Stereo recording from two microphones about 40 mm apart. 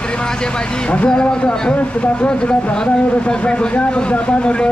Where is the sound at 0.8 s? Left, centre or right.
Left.